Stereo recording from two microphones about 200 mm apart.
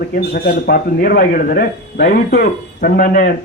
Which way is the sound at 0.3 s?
50° left (ahead or behind).